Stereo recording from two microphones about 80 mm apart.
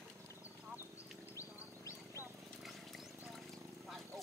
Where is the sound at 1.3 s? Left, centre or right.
Left.